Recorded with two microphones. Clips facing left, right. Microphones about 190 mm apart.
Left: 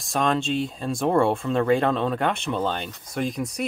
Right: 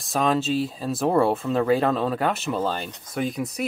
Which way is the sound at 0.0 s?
Centre (ahead or behind).